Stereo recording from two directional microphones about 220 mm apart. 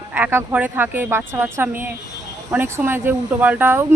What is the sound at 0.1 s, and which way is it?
Speech, 10° right (ahead or behind).